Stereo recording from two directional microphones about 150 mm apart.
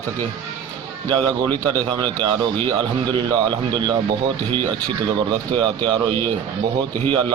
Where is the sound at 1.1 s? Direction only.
30° right (ahead or behind).